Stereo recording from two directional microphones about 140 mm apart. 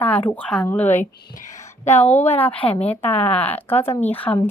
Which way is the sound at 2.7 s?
45° left (ahead or behind).